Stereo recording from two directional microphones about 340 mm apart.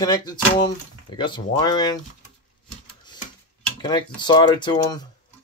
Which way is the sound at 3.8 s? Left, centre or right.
Centre.